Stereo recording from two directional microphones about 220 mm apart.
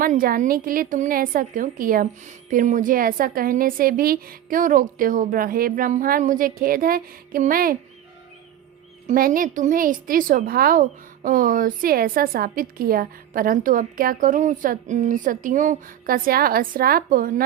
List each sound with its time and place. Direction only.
0.0 s a woman's voice: 40° right (ahead or behind)
9.0 s a woman's voice: 40° right (ahead or behind)